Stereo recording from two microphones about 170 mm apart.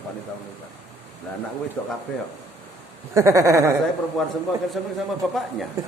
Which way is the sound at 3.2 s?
15° right (ahead or behind).